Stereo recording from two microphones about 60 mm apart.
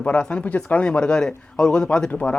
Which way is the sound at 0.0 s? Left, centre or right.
Left.